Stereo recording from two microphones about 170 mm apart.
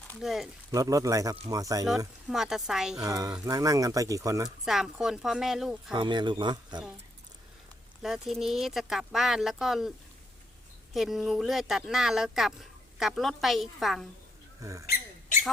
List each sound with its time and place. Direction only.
0.2 s speech: centre (ahead or behind)
0.7 s speech: 20° right (ahead or behind)
2.3 s speech: centre (ahead or behind)
3.0 s speech: 20° right (ahead or behind)
4.4 s speech: 5° right (ahead or behind)
5.9 s speech: 25° right (ahead or behind)
8.0 s speech: centre (ahead or behind)
10.9 s speech: centre (ahead or behind)
14.6 s speech: 20° right (ahead or behind)